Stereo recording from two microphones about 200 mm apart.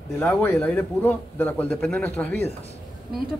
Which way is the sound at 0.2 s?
10° left (ahead or behind).